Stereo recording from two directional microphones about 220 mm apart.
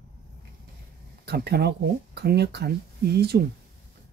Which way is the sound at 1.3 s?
50° right (ahead or behind).